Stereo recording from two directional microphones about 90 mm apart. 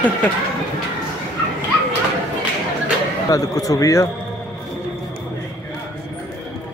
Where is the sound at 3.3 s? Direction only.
40° left (ahead or behind).